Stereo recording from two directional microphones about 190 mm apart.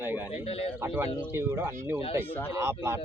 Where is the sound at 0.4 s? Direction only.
30° left (ahead or behind).